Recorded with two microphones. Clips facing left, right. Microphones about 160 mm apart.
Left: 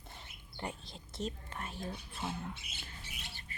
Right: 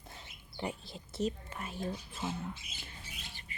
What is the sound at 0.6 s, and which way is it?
Whispering, 5° right (ahead or behind).